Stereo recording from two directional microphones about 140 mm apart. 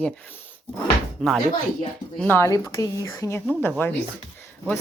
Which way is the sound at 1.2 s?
5° left (ahead or behind).